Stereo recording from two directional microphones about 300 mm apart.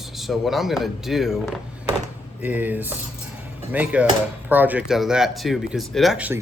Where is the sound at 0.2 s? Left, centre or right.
Centre.